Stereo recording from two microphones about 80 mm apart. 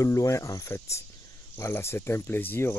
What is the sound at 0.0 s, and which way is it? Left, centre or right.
Speech, left.